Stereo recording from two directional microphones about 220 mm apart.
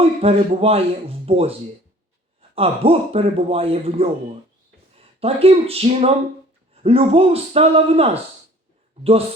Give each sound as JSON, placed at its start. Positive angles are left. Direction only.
{"t": 0.0, "sound": "speech", "side_deg": -25}
{"t": 2.6, "sound": "speech", "side_deg": -25}